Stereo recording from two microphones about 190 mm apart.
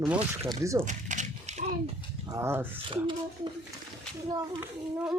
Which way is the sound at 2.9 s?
25° right (ahead or behind).